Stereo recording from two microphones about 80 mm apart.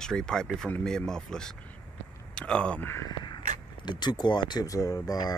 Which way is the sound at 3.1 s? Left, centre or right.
Left.